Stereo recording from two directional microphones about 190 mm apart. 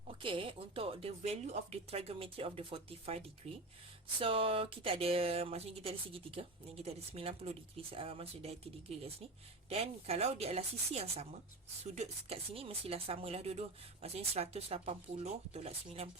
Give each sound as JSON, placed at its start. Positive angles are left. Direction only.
{"t": 0.1, "sound": "a woman's voice", "side_deg": -25}